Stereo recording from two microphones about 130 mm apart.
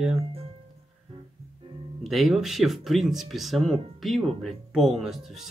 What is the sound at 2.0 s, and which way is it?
Speech, centre (ahead or behind).